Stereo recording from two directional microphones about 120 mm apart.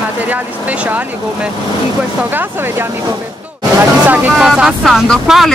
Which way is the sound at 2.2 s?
15° right (ahead or behind).